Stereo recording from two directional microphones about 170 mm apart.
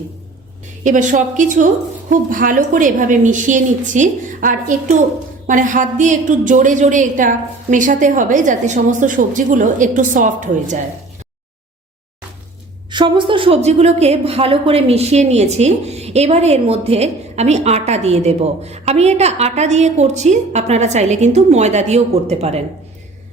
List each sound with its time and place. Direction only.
0.9 s a woman's voice: 50° right (ahead or behind)
12.9 s a woman's voice: 30° right (ahead or behind)